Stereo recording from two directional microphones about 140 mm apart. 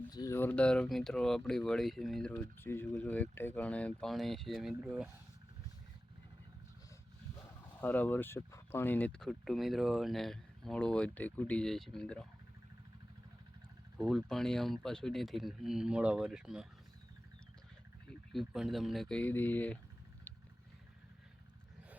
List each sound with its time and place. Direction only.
0.1 s speech: 30° left (ahead or behind)
0.3 s speech: 10° left (ahead or behind)
2.6 s speech: 15° left (ahead or behind); by 5.0 s 5° right (ahead or behind)
7.4 s speech: 15° left (ahead or behind)
14.1 s speech: centre (ahead or behind)
18.1 s speech: centre (ahead or behind)